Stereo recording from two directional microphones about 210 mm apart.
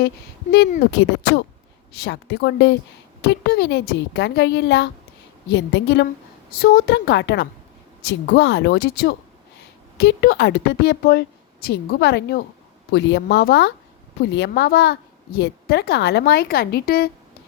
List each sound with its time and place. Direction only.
0.5 s a woman's voice: 50° left (ahead or behind)